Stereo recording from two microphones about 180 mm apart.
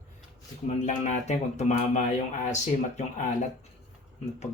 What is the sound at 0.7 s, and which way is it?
Speech, 40° left (ahead or behind).